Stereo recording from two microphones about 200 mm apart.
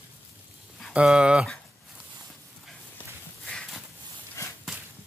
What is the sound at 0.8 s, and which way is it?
Speech, 5° right (ahead or behind).